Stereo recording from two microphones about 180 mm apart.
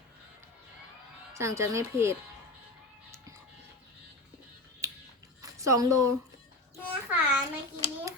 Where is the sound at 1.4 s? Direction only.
15° right (ahead or behind).